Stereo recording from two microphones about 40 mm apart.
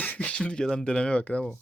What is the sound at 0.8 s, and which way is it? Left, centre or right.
Speech, left.